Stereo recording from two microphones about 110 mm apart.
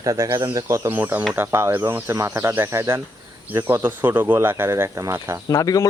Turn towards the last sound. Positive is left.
turn(degrees=30)  # may be behind; listen again after turning